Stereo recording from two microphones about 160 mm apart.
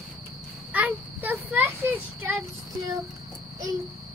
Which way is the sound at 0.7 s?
10° right (ahead or behind).